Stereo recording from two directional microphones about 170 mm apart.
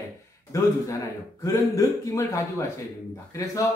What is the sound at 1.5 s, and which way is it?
A man's voice, 20° left (ahead or behind).